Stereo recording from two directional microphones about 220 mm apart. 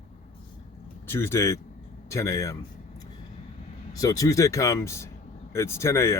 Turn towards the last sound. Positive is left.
turn(degrees=10)  # may be behind; listen again after turning